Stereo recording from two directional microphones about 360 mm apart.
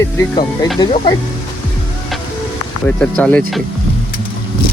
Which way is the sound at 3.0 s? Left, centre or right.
Centre.